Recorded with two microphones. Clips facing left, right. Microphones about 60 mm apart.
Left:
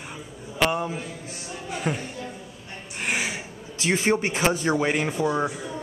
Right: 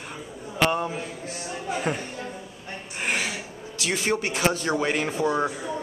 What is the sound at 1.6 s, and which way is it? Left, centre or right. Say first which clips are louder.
Music: right 1 dB; centre.